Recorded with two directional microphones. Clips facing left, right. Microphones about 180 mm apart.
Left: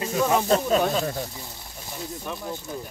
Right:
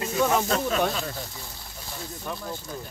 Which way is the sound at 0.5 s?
35° left (ahead or behind).